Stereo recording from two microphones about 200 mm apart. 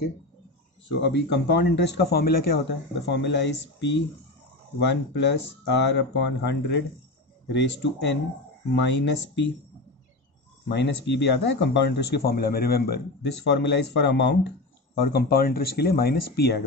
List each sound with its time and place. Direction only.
0.8 s speech: 60° left (ahead or behind)
10.7 s speech: 60° left (ahead or behind)